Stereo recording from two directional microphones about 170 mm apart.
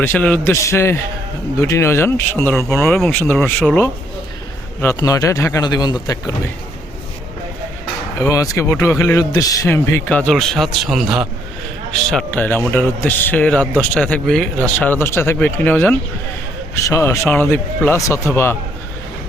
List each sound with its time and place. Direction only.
0.0 s a man's voice: 10° left (ahead or behind)
2.8 s a man's voice: 5° left (ahead or behind); by 6.3 s 20° left (ahead or behind)
8.2 s a man's voice: 20° left (ahead or behind); by 11.3 s 5° right (ahead or behind)
12.1 s a man's voice: 10° left (ahead or behind)